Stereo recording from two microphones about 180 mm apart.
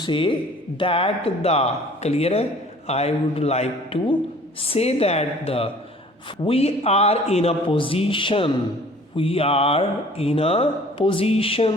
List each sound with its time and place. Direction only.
0.0 s speech: 30° left (ahead or behind)